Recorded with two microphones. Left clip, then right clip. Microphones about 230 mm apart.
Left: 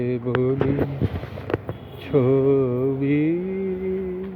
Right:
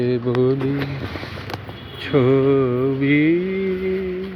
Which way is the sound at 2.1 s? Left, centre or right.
Centre.